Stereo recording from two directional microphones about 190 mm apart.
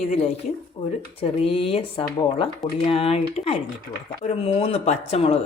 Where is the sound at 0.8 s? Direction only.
40° left (ahead or behind).